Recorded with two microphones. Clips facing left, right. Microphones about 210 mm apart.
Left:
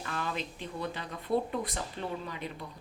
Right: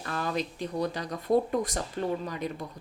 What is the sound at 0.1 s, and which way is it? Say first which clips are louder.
A woman's voice: right 6 dB; 40° right (ahead or behind).